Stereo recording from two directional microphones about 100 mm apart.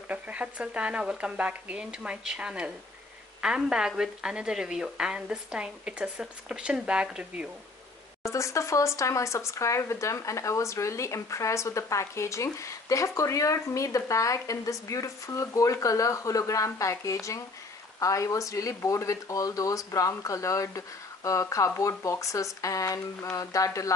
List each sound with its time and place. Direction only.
0.1 s a woman's voice: 15° right (ahead or behind)
8.2 s speech: 30° left (ahead or behind)